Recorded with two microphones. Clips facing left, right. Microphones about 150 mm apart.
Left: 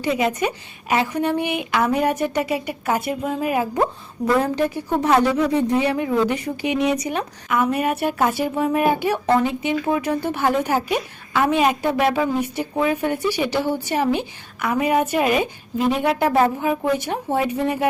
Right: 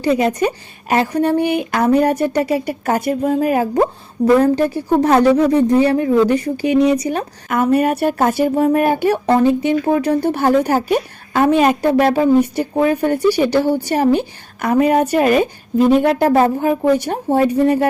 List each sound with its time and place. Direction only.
0.0 s speech: 35° right (ahead or behind)